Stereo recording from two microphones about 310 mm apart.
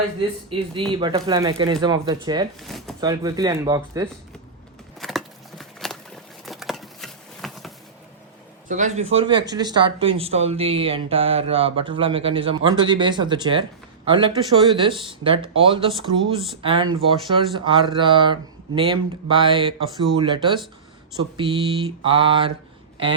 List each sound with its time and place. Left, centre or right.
0.5 s speech: centre
2.6 s speech: centre
3.0 s speech: centre
4.9 s a sound: centre
8.6 s a man's voice: right